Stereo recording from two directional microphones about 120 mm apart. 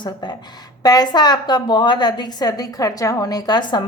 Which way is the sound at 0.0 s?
35° left (ahead or behind).